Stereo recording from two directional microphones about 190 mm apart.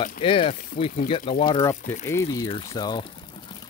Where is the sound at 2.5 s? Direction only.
25° left (ahead or behind).